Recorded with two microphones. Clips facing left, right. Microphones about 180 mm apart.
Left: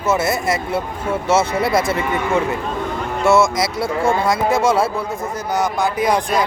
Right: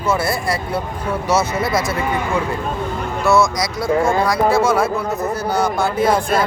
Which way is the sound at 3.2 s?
25° left (ahead or behind).